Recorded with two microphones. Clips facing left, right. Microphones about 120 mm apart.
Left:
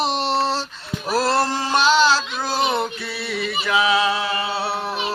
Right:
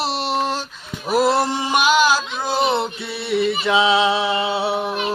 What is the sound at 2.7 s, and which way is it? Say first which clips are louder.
Music: right 2 dB; 25° right (ahead or behind).